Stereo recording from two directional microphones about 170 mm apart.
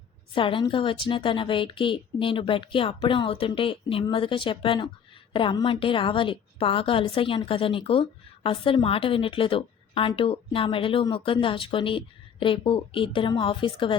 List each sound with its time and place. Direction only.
0.3 s a woman's voice: 30° left (ahead or behind)